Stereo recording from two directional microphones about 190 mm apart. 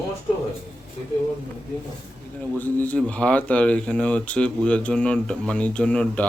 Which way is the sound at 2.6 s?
10° left (ahead or behind).